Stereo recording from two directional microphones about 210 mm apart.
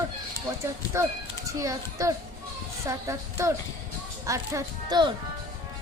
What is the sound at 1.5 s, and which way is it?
Speech, 15° right (ahead or behind).